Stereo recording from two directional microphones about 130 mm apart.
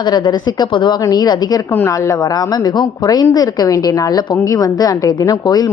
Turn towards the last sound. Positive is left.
turn(degrees=30)  # may be behind; listen again after turning